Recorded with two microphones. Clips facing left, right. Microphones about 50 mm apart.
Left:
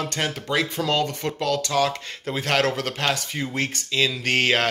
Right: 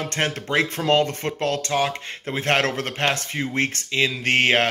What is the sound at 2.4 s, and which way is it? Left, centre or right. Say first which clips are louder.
A man's voice: right 1 dB; right.